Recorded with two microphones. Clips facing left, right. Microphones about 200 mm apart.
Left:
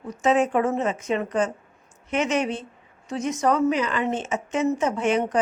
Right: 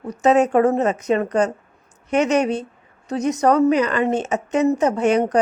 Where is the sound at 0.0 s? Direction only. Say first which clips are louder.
Right 5 dB; 40° right (ahead or behind).